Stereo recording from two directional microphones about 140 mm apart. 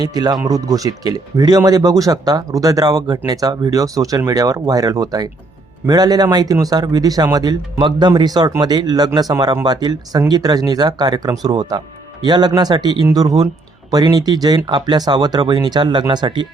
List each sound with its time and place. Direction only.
0.0 s speech: 30° right (ahead or behind)